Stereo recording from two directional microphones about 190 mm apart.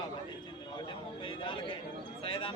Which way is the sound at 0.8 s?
25° left (ahead or behind).